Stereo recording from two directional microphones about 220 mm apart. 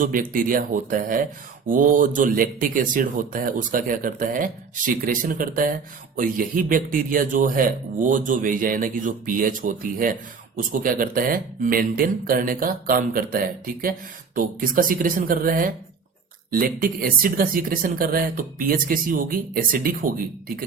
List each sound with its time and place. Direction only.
0.0 s speech: 40° right (ahead or behind)